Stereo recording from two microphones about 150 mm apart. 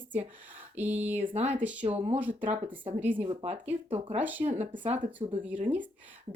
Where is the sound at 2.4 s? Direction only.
40° right (ahead or behind).